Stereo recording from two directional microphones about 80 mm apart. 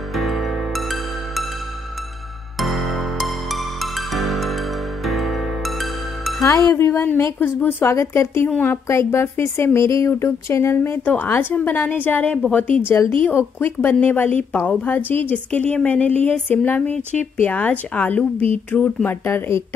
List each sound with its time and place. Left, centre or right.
0.1 s music: centre
2.6 s music: centre
6.4 s music: left
6.8 s a woman's voice: left
13.7 s a woman's voice: centre
19.0 s a woman's voice: left